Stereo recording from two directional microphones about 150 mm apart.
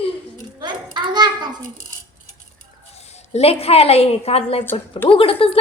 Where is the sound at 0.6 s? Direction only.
30° right (ahead or behind).